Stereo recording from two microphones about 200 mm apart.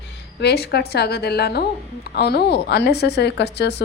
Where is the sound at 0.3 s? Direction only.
55° left (ahead or behind).